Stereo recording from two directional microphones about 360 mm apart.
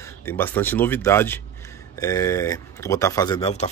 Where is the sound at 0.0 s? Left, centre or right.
Centre.